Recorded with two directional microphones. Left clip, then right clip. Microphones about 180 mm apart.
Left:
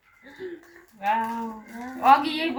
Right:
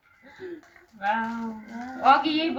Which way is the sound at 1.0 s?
5° left (ahead or behind).